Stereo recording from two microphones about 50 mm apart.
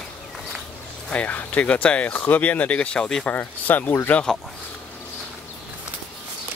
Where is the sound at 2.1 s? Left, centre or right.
Left.